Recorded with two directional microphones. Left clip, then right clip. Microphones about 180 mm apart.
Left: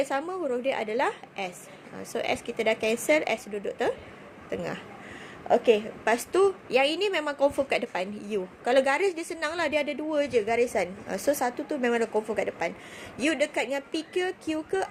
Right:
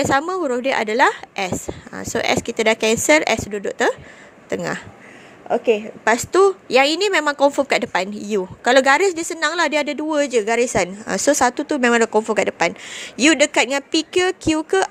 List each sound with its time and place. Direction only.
0.0 s a woman's voice: 45° right (ahead or behind)
5.5 s a woman's voice: 25° right (ahead or behind)
6.1 s a woman's voice: 40° right (ahead or behind)